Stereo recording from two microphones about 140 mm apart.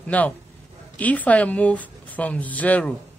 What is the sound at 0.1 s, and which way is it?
Speech, 10° left (ahead or behind).